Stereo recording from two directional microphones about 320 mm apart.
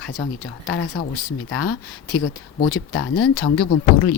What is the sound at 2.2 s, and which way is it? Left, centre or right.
Speech, left.